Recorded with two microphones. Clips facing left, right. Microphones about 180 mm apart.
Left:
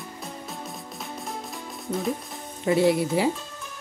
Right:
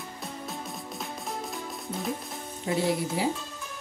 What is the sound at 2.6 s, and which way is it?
Speech, 75° left (ahead or behind).